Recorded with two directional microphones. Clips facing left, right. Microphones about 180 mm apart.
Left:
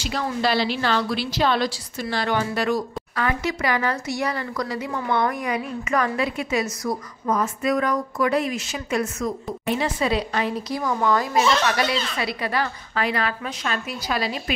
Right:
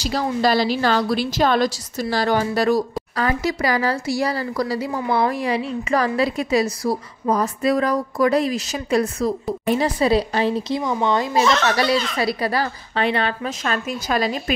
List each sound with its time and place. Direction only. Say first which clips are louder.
0.0 s a woman's voice: right 4 dB; 35° right (ahead or behind)
11.7 s a woman's voice: right 4 dB; 35° right (ahead or behind)
13.7 s a woman's voice: right 3 dB; 45° right (ahead or behind)